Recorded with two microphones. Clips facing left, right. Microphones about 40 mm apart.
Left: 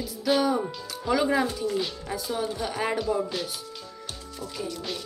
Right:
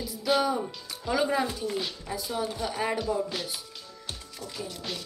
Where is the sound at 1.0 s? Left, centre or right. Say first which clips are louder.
Left 3 dB; left.